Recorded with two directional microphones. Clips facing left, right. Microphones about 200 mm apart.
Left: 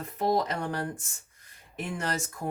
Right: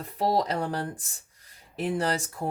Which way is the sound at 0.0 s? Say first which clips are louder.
Right 1 dB; 35° right (ahead or behind).